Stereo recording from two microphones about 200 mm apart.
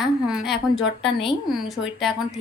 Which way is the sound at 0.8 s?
60° left (ahead or behind).